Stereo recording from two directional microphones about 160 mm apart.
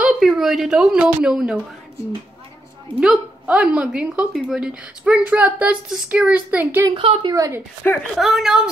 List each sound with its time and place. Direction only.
0.0 s a woman's voice: centre (ahead or behind)
3.0 s a woman's voice: 5° right (ahead or behind)
6.9 s a woman's voice: 35° right (ahead or behind)
7.3 s a woman's voice: 20° right (ahead or behind)
8.2 s a woman's voice: centre (ahead or behind)